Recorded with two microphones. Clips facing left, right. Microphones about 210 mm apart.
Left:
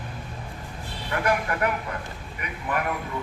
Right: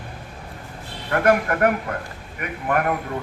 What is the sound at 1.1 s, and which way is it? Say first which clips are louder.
A man's voice: right 7 dB; 55° right (ahead or behind).